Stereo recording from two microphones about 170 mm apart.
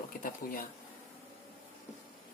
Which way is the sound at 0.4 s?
55° left (ahead or behind).